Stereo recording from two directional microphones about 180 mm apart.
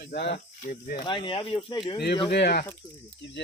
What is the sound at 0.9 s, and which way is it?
Speech, 25° left (ahead or behind).